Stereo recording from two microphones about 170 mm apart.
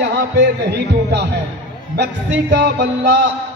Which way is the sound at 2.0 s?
90° right.